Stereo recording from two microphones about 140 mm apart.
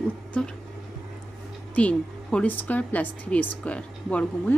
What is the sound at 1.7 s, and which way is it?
Speech, 10° left (ahead or behind).